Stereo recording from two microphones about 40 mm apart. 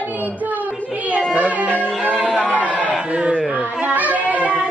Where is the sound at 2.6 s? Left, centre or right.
Left.